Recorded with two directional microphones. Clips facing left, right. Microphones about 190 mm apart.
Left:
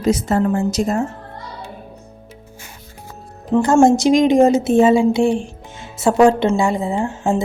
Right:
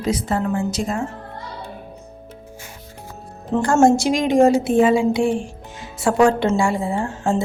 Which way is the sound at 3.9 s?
20° left (ahead or behind).